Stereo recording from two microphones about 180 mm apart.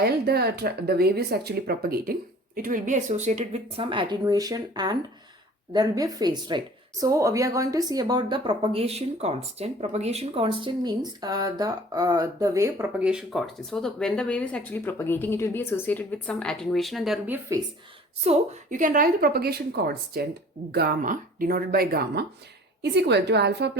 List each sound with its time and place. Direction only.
0.0 s speech: 60° right (ahead or behind); by 17.6 s 10° right (ahead or behind)
18.2 s a woman's voice: 40° right (ahead or behind); by 23.7 s 70° right (ahead or behind)